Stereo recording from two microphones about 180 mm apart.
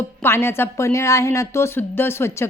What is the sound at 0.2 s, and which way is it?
A woman's voice, 15° left (ahead or behind).